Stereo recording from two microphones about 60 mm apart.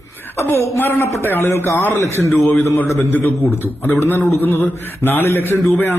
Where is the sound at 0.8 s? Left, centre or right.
Left.